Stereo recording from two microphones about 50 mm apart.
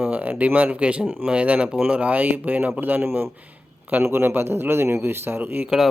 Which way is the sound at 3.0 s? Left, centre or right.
Right.